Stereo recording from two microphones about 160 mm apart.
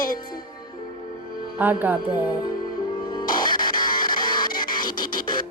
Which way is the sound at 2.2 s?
25° left (ahead or behind).